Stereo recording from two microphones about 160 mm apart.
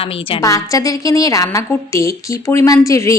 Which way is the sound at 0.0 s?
35° left (ahead or behind).